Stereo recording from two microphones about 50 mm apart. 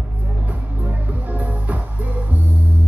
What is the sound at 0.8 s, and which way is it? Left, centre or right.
Music, right.